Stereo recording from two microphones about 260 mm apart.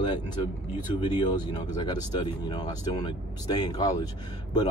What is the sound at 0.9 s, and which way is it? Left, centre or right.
Speech, centre.